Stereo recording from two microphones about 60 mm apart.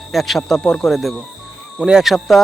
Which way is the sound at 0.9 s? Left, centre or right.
Centre.